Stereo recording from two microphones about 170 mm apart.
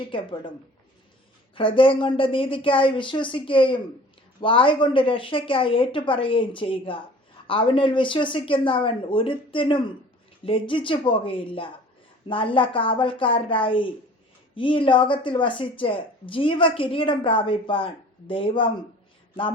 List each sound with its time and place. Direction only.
0.1 s a woman's voice: 30° left (ahead or behind)
1.5 s speech: 30° left (ahead or behind)